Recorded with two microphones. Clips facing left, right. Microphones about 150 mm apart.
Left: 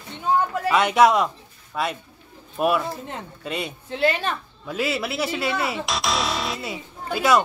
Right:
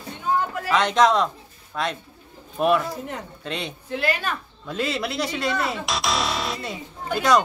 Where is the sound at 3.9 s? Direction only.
25° left (ahead or behind).